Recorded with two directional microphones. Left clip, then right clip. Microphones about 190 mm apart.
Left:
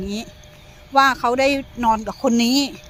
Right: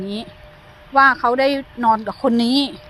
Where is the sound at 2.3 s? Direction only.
15° right (ahead or behind).